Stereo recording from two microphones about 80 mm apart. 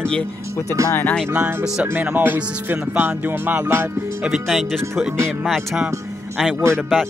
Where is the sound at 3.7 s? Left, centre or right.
Right.